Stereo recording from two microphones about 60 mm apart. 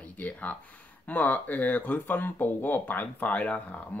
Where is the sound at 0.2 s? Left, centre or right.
Left.